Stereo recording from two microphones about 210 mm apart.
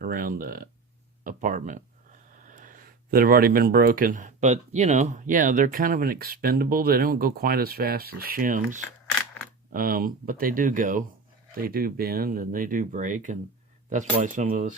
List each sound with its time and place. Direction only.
0.0 s speech: 40° right (ahead or behind)